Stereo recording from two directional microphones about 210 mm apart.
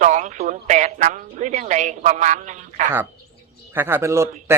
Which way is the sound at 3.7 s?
10° right (ahead or behind).